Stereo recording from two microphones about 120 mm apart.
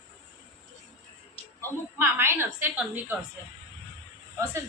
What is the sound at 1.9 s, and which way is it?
A woman's voice, 20° right (ahead or behind).